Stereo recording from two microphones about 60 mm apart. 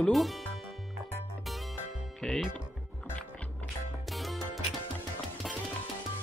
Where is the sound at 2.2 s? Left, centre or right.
Centre.